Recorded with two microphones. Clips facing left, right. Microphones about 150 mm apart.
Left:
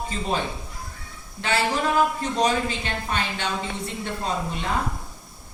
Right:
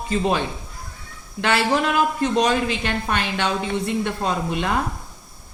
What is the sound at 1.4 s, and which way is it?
Speech, 70° right (ahead or behind).